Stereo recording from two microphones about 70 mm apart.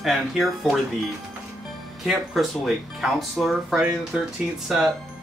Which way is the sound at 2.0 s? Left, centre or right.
Centre.